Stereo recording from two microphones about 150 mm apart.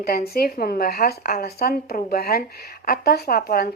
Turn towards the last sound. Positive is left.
turn(degrees=90)